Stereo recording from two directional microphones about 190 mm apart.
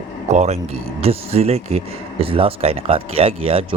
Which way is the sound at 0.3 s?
35° right (ahead or behind).